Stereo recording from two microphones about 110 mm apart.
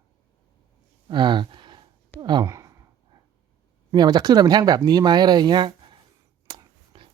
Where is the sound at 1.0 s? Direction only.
45° right (ahead or behind).